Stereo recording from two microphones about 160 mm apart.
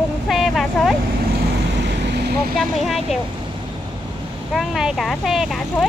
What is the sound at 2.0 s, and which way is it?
Vehicle, 90° right.